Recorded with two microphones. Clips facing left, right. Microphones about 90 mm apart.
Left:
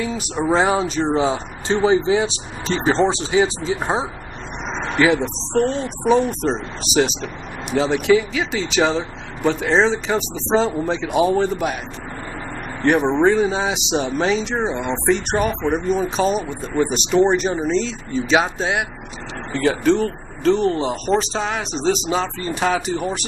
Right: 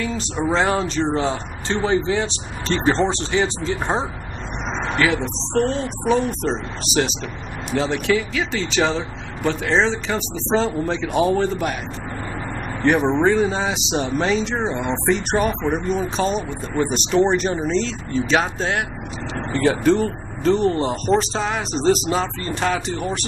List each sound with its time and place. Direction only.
0.0 s speech: 15° left (ahead or behind)
4.9 s speech: 20° left (ahead or behind)
5.2 s speech: centre (ahead or behind)
12.8 s speech: centre (ahead or behind)
22.4 s speech: 10° left (ahead or behind)